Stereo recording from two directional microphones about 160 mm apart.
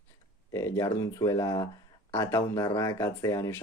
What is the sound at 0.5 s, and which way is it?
Speech, 20° left (ahead or behind).